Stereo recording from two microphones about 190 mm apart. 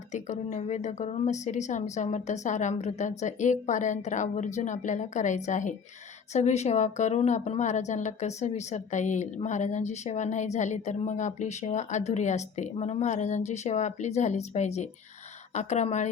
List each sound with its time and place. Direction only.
0.1 s a woman's voice: 40° left (ahead or behind)